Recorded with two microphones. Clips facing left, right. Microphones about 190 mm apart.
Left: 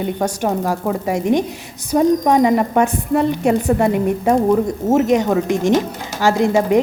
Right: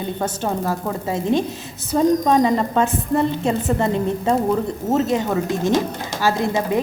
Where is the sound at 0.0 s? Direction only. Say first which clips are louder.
Left 4 dB; 15° left (ahead or behind).